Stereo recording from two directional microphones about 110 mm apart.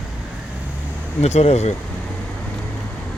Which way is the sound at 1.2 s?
80° left.